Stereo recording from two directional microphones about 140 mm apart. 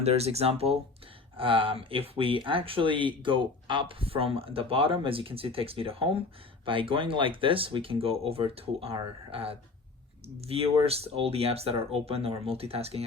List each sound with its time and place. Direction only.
0.0 s speech: 45° right (ahead or behind)